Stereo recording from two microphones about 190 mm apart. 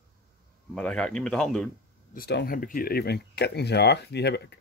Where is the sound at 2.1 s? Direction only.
55° left (ahead or behind).